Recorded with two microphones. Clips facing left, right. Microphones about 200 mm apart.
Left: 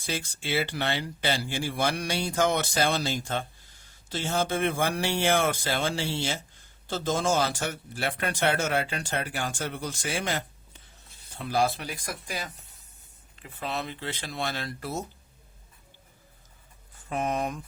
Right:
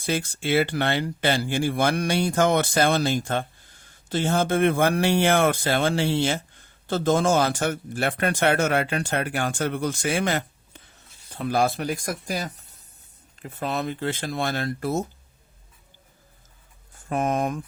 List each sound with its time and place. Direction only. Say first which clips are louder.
0.0 s speech: right 7 dB; 55° right (ahead or behind)
11.4 s speech: right 4 dB; 50° right (ahead or behind)
17.1 s speech: right 5 dB; 50° right (ahead or behind)